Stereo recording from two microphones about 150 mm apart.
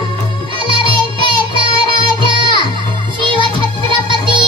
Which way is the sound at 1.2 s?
35° right (ahead or behind).